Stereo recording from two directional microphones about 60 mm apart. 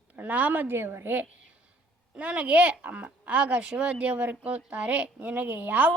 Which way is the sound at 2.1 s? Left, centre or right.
Centre.